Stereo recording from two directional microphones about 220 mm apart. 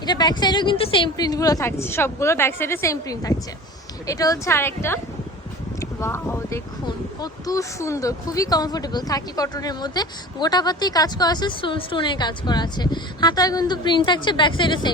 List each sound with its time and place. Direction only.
0.0 s a woman's voice: 20° left (ahead or behind)